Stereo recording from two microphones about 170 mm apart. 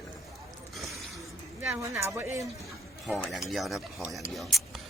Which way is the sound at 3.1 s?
Centre (ahead or behind).